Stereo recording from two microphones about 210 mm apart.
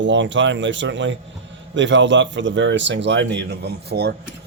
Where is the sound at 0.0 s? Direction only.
60° right (ahead or behind).